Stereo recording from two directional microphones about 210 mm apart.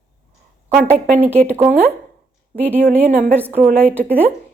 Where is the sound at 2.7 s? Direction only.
10° right (ahead or behind).